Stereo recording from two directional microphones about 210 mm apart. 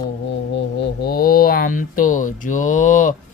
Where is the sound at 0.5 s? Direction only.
55° left (ahead or behind); by 3.2 s 35° left (ahead or behind).